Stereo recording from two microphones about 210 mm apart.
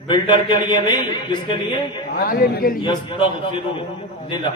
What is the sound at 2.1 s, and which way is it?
Speech, 45° left (ahead or behind).